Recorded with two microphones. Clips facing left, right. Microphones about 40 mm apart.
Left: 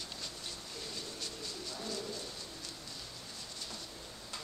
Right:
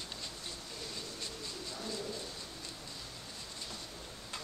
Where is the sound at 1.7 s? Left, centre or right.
Centre.